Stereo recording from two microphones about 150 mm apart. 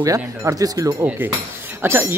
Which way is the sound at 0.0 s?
20° right (ahead or behind).